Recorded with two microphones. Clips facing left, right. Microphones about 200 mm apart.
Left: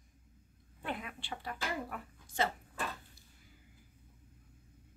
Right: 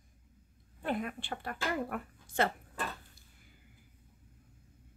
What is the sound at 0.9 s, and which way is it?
Speech, 45° right (ahead or behind).